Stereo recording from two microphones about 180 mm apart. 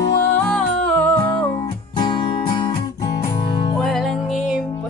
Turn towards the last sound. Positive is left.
turn(degrees=0)  # may be behind; listen again after turning